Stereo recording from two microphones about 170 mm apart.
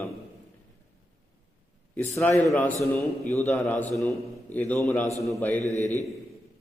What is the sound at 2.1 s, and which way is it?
A man's voice, 15° left (ahead or behind).